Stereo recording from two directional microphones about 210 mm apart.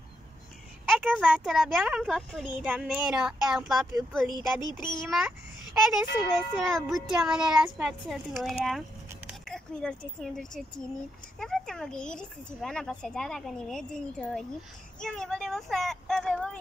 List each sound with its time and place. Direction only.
0.9 s speech: 5° right (ahead or behind)
4.6 s a child's voice: 20° left (ahead or behind)
4.9 s speech: centre (ahead or behind)